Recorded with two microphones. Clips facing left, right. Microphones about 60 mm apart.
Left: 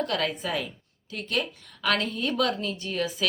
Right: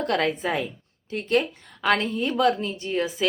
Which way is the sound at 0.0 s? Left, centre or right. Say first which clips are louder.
Right 4 dB; right.